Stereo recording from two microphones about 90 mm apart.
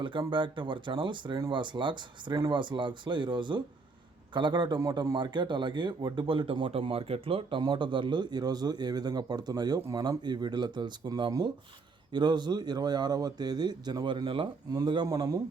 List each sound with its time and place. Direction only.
0.0 s speech: 65° right (ahead or behind)
4.8 s a man's voice: 40° right (ahead or behind)
5.1 s speech: 60° right (ahead or behind); by 7.6 s 90° right
7.6 s a man's voice: 65° right (ahead or behind)
14.7 s a man's voice: 55° right (ahead or behind)